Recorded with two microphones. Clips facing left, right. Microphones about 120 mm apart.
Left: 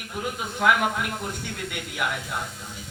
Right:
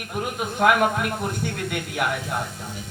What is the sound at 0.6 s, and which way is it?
Speech, 50° right (ahead or behind).